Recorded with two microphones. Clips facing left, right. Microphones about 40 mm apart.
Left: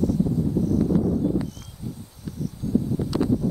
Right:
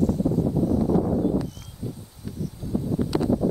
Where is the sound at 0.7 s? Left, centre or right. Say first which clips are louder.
Left 1 dB; centre.